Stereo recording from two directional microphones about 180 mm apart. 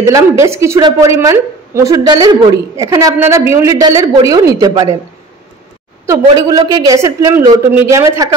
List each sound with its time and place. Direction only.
0.0 s a woman's voice: 15° right (ahead or behind)
6.0 s a woman's voice: 20° right (ahead or behind)